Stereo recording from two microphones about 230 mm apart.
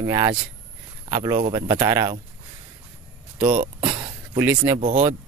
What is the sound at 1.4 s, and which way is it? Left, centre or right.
Speech, centre.